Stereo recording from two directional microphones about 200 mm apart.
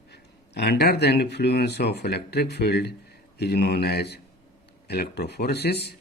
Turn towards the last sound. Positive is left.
turn(degrees=55)  # may be behind; listen again after turning